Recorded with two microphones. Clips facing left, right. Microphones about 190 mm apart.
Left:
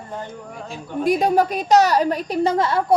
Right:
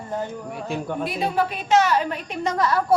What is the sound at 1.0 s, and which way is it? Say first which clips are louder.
A woman's voice: left 9 dB; 45° left (ahead or behind).